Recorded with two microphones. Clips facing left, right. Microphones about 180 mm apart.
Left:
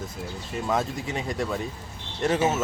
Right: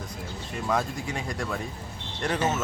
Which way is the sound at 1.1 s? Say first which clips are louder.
Left 3 dB; 20° left (ahead or behind).